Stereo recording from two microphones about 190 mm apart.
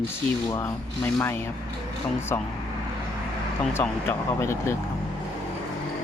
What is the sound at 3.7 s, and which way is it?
Speech, 10° left (ahead or behind).